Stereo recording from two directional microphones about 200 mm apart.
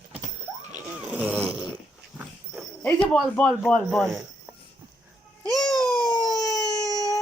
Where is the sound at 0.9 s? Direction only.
5° right (ahead or behind).